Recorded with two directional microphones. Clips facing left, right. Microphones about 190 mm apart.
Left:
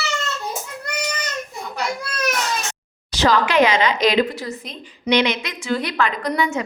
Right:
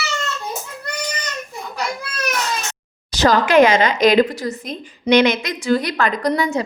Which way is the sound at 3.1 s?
45° right (ahead or behind).